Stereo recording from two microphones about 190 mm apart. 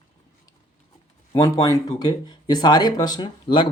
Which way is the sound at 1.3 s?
15° left (ahead or behind).